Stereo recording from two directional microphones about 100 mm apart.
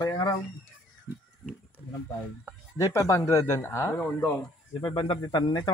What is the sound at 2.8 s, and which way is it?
Speech, 30° left (ahead or behind).